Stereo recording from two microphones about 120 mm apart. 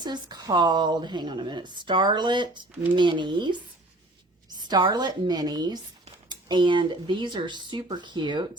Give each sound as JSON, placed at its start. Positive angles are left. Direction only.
{"t": 0.0, "sound": "a woman's voice", "side_deg": -35}